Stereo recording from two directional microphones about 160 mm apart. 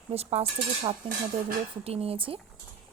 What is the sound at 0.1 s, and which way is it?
Speech, 40° right (ahead or behind).